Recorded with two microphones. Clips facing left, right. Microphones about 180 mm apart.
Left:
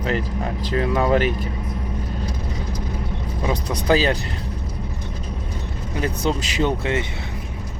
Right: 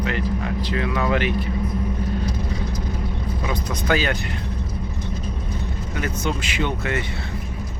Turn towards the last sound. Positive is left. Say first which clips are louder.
# left 2 dB
turn(degrees=25)  # may be behind; listen again after turning